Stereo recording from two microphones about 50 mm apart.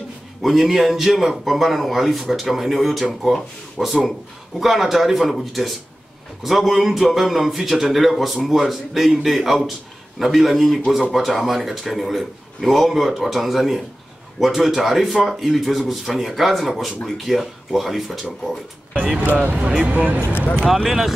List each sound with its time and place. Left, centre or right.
0.4 s a man's voice: centre
19.5 s speech: right
20.6 s a man's voice: centre